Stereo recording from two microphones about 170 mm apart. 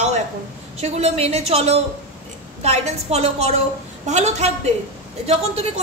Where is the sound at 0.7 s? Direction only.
40° right (ahead or behind).